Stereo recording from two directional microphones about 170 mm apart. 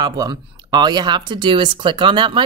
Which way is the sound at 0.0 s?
25° right (ahead or behind).